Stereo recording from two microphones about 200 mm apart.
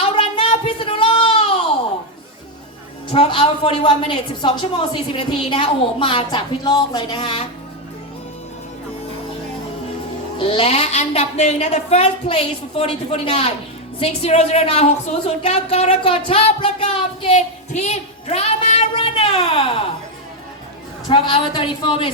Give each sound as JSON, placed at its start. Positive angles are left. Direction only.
{"t": 0.0, "sound": "a sound", "side_deg": 25}
{"t": 3.1, "sound": "a woman's voice", "side_deg": 30}
{"t": 10.3, "sound": "a woman's voice", "side_deg": 30}
{"t": 21.1, "sound": "a woman's voice", "side_deg": 25}